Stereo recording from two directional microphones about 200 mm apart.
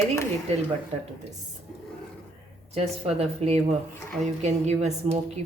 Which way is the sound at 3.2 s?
30° right (ahead or behind).